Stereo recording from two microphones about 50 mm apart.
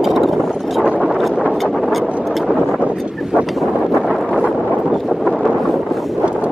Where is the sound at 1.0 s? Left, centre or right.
Centre.